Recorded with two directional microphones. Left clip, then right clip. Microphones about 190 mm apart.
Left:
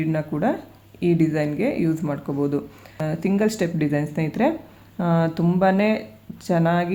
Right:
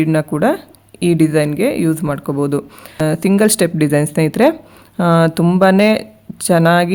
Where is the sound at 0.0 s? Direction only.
55° right (ahead or behind).